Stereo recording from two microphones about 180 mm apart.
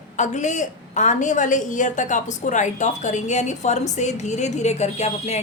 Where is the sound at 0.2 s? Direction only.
40° left (ahead or behind).